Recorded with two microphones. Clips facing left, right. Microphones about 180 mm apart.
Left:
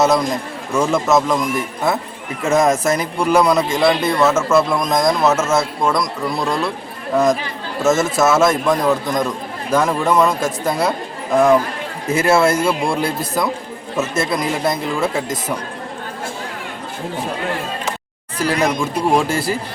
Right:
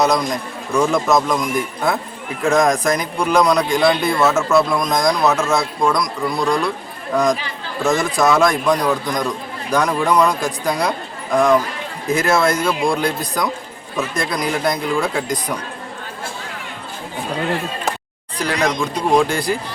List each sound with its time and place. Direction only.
0.0 s speech: 5° left (ahead or behind)
14.2 s speech: 5° left (ahead or behind)
18.3 s speech: 5° left (ahead or behind)